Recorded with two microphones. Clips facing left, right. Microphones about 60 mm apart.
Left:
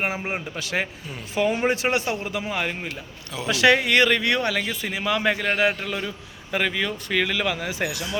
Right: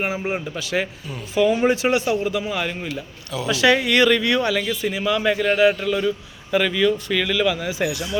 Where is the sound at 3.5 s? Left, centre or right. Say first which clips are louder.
Right 1 dB; left.